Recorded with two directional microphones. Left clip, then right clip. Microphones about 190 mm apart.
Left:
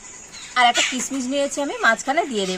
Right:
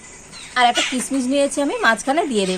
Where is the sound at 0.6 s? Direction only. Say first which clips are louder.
Right 1 dB; 5° right (ahead or behind).